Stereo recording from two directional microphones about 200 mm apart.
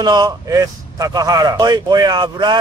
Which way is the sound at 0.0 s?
20° right (ahead or behind).